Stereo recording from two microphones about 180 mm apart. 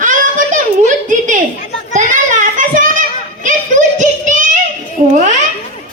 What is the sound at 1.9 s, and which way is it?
Child singing, 45° right (ahead or behind).